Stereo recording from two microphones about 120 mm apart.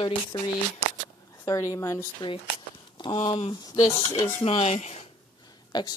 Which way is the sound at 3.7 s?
40° left (ahead or behind).